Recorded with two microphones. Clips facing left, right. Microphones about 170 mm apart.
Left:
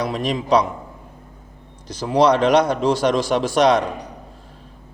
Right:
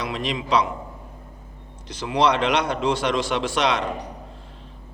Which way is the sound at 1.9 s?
40° left (ahead or behind).